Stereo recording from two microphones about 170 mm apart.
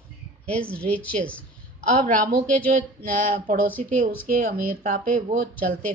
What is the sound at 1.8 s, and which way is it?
A woman's voice, 50° right (ahead or behind).